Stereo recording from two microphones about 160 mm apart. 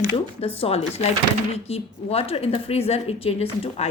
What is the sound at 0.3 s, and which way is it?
A woman's voice, 35° left (ahead or behind).